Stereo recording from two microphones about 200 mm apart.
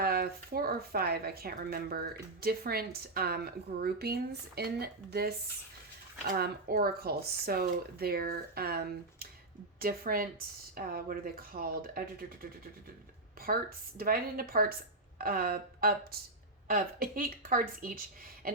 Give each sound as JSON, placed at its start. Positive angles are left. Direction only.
{"t": 0.0, "sound": "speech", "side_deg": -50}
{"t": 14.0, "sound": "speech", "side_deg": -45}
{"t": 18.4, "sound": "a sound", "side_deg": -45}